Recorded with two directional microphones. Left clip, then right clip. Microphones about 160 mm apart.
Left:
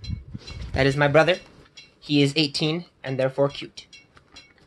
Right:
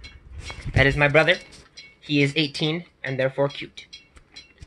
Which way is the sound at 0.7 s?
20° left (ahead or behind).